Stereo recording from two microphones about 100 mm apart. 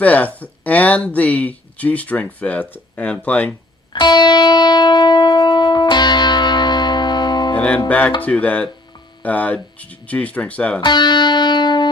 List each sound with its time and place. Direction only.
0.0 s speech: 15° left (ahead or behind)
3.9 s music: 45° left (ahead or behind)
7.5 s music: 10° left (ahead or behind)
8.2 s speech: 15° left (ahead or behind)
10.8 s music: 50° left (ahead or behind)